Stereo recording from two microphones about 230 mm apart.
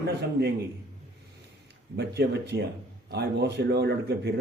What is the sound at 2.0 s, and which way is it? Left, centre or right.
A man's voice, right.